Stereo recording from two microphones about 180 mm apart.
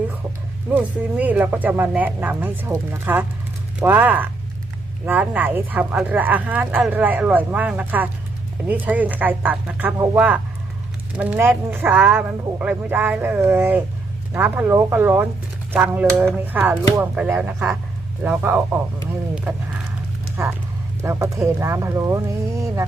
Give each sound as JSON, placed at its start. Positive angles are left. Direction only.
{"t": 0.7, "sound": "speech", "side_deg": -10}